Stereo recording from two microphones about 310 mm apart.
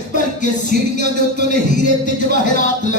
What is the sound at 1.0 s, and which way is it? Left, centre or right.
Music, right.